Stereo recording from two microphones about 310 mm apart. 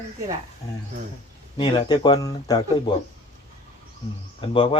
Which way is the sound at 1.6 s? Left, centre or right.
Centre.